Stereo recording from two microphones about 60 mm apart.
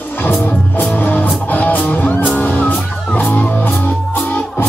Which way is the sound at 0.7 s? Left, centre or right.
Left.